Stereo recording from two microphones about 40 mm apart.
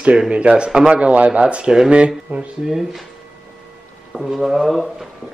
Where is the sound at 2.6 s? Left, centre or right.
Centre.